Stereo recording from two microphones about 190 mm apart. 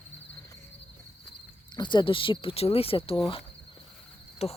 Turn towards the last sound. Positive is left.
turn(degrees=35)  # may be behind; listen again after turning